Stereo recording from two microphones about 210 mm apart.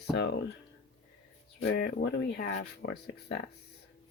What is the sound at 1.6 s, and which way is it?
Speech, 50° left (ahead or behind).